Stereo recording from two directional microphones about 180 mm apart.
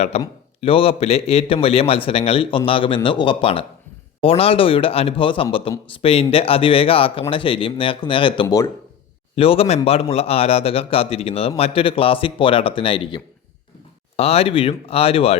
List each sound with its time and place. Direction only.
0.1 s speech: 35° left (ahead or behind); by 8.7 s 20° left (ahead or behind)
9.3 s speech: 30° left (ahead or behind)